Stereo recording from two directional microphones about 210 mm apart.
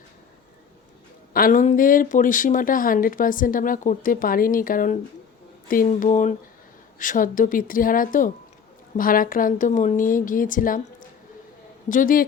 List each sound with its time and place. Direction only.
1.3 s speech: 40° left (ahead or behind)
11.9 s speech: 40° left (ahead or behind)